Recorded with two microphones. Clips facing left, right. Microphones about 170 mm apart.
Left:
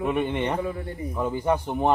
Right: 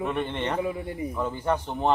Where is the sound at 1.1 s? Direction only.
15° left (ahead or behind).